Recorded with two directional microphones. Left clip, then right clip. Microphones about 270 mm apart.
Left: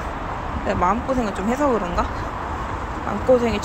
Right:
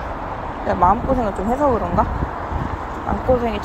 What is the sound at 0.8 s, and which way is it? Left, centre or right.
Speech, centre.